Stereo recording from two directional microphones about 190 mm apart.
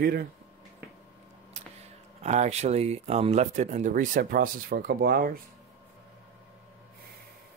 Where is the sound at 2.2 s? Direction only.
35° right (ahead or behind).